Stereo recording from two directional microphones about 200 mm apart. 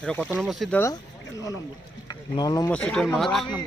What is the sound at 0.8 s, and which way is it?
Speech, 15° left (ahead or behind).